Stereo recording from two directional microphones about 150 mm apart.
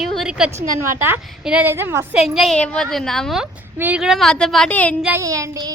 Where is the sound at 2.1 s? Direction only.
Centre (ahead or behind).